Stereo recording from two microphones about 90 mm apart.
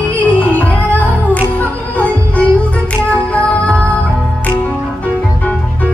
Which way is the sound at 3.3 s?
15° left (ahead or behind).